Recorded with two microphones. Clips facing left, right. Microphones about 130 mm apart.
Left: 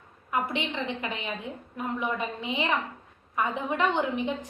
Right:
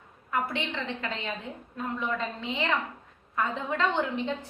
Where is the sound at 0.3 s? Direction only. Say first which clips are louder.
Left 1 dB; 15° left (ahead or behind).